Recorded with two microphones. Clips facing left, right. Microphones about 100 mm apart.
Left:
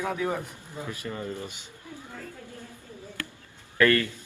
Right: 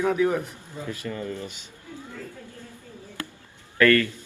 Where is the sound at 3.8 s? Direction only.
20° left (ahead or behind).